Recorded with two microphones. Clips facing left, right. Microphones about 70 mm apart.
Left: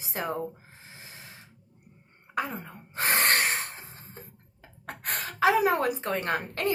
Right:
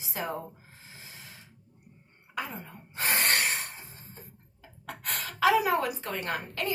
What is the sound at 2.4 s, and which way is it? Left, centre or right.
Gasp, left.